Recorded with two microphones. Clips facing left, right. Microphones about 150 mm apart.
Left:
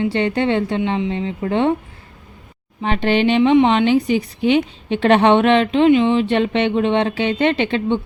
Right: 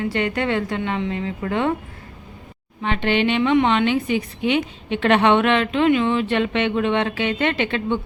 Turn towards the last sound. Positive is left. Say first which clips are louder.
# left 4 dB
turn(degrees=30)  # may be behind; listen again after turning